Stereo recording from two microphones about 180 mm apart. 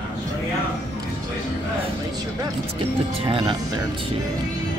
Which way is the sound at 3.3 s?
25° right (ahead or behind).